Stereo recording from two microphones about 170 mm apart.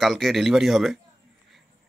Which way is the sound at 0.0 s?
Centre (ahead or behind).